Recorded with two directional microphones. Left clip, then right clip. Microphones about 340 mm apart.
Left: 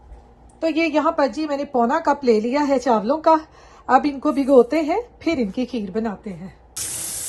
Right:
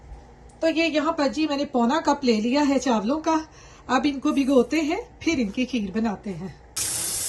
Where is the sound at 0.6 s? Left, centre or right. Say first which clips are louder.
Left 1 dB; left.